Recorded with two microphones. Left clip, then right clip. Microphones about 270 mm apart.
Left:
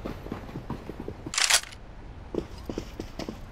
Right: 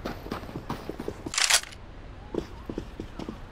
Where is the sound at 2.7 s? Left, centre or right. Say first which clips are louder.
Left 2 dB; centre.